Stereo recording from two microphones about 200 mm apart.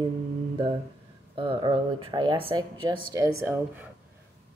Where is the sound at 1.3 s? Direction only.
25° right (ahead or behind).